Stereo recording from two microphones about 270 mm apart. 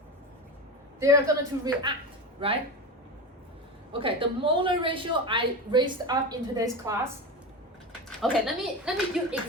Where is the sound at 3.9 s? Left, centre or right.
Centre.